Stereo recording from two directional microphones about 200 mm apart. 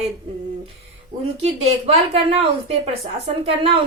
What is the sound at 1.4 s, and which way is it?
A woman's voice, 30° right (ahead or behind).